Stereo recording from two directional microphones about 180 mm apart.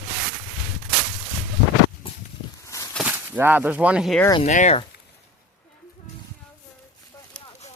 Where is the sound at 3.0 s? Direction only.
10° right (ahead or behind).